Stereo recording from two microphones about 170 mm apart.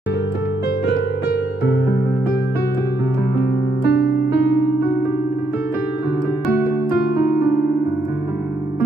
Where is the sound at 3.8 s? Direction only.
75° left (ahead or behind).